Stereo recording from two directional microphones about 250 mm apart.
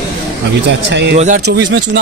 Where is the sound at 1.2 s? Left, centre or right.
Right.